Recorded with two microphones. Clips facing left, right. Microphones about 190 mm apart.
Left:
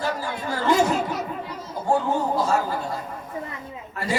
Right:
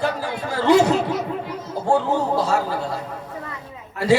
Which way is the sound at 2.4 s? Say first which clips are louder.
Right 2 dB; 70° right (ahead or behind).